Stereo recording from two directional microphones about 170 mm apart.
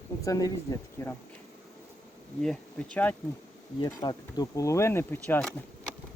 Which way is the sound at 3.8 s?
25° left (ahead or behind).